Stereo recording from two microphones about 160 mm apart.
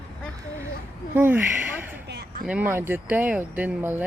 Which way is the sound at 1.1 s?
10° right (ahead or behind).